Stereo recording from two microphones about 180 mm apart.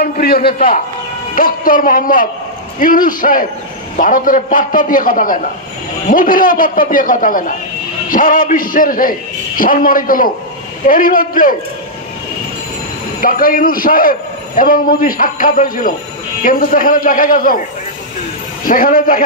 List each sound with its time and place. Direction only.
0.0 s a man's voice: 55° left (ahead or behind)
13.2 s a man's voice: 50° left (ahead or behind)
18.7 s a man's voice: 50° left (ahead or behind)